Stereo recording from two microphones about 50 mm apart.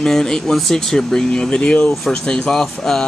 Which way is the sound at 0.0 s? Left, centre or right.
Centre.